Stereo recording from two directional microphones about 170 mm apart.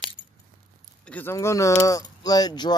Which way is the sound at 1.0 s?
10° left (ahead or behind).